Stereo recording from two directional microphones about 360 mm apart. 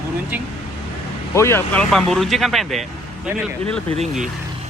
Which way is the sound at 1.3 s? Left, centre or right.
Centre.